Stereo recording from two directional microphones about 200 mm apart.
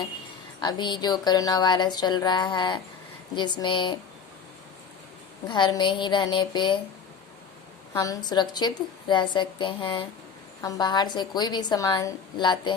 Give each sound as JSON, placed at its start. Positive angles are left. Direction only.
{"t": 0.6, "sound": "speech", "side_deg": 20}
{"t": 5.5, "sound": "speech", "side_deg": 25}
{"t": 7.9, "sound": "speech", "side_deg": 15}